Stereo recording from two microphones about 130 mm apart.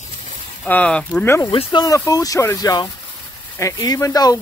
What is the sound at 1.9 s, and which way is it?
Speech, 25° left (ahead or behind).